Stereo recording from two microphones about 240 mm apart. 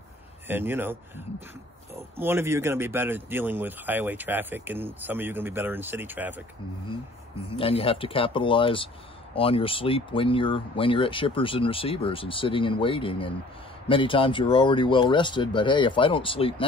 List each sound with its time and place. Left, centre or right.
0.5 s speech: centre
7.5 s speech: left